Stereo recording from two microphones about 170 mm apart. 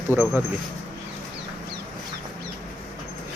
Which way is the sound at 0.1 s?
15° right (ahead or behind).